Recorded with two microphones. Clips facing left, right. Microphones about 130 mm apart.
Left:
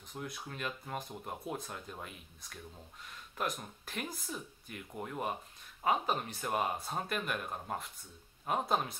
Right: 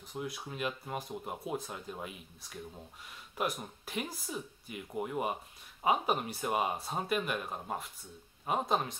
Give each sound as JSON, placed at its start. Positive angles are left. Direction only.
{"t": 0.1, "sound": "speech", "side_deg": -5}